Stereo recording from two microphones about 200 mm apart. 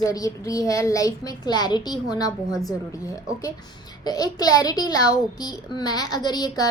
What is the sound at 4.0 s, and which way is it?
A woman's voice, 20° left (ahead or behind).